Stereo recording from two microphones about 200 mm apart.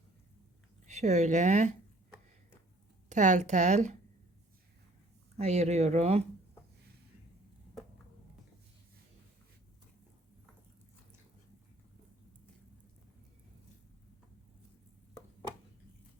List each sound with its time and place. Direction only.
0.9 s speech: 35° right (ahead or behind)
3.1 s speech: 40° right (ahead or behind)
5.4 s speech: 35° right (ahead or behind)